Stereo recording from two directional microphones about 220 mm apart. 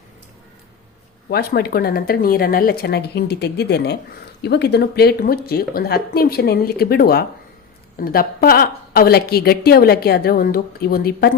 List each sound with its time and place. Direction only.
1.3 s a woman's voice: 45° left (ahead or behind)